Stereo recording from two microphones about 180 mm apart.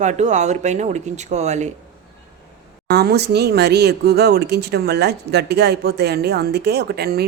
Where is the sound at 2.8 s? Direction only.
65° right (ahead or behind).